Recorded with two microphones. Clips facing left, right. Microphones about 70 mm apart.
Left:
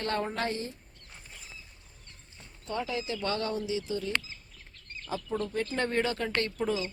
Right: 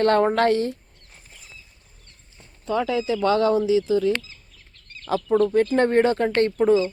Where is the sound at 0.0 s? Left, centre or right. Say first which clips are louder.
Right 13 dB; right.